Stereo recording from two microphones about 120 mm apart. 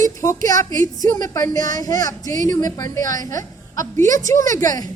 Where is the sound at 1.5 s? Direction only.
90° right.